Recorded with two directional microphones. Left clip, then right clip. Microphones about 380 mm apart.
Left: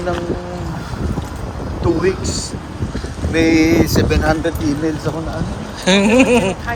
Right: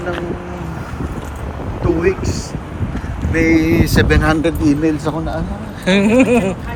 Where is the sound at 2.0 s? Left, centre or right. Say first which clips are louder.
Right 1 dB; left.